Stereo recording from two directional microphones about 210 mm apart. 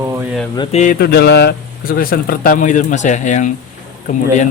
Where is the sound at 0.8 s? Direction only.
45° left (ahead or behind).